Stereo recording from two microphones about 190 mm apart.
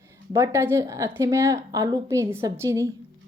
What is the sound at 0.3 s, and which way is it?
A woman's voice, 15° right (ahead or behind).